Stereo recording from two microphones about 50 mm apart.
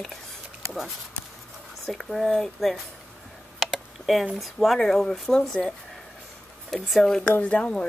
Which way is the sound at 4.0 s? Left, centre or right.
Centre.